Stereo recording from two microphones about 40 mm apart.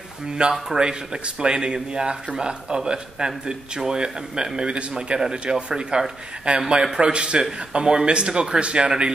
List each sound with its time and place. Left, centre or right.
0.4 s speech: centre